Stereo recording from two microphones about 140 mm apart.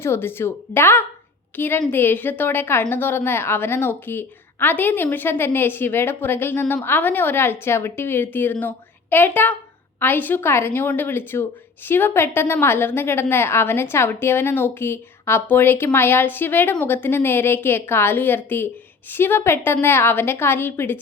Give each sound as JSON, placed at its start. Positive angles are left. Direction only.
{"t": 0.0, "sound": "a woman's voice", "side_deg": 15}